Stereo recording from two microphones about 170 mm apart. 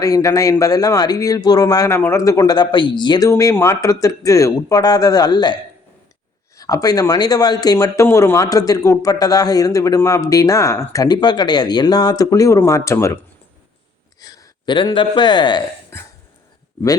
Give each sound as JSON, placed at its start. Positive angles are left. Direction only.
{"t": 0.0, "sound": "speech", "side_deg": 20}
{"t": 6.6, "sound": "speech", "side_deg": 20}
{"t": 14.2, "sound": "speech", "side_deg": 20}